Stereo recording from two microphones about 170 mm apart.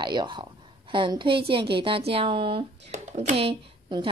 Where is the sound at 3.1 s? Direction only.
40° right (ahead or behind).